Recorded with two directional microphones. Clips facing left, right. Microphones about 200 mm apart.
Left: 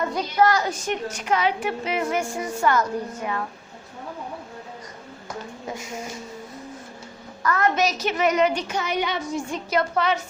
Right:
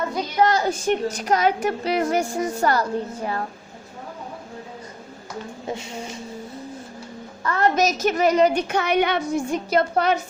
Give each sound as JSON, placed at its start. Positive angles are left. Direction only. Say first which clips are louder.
{"t": 0.3, "sound": "a woman's voice", "louder": "right 1 dB", "side_deg": -25}
{"t": 5.6, "sound": "speech", "louder": "right 3 dB", "side_deg": -30}
{"t": 7.4, "sound": "a woman's voice", "louder": "right 1 dB", "side_deg": -30}
{"t": 7.8, "sound": "a woman's voice", "louder": "right 3 dB", "side_deg": -45}
{"t": 8.5, "sound": "a woman's voice", "louder": "right 5 dB", "side_deg": -60}
{"t": 9.6, "sound": "a woman's voice", "louder": "right 1 dB", "side_deg": -30}